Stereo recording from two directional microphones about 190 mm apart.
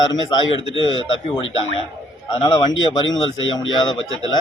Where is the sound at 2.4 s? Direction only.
25° left (ahead or behind).